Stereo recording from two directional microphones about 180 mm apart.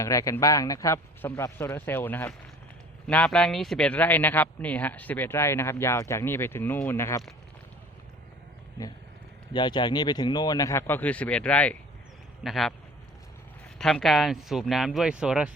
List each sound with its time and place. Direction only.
0.0 s speech: 20° left (ahead or behind)
9.5 s a man's voice: 25° left (ahead or behind); by 12.7 s centre (ahead or behind)
13.7 s speech: 5° left (ahead or behind)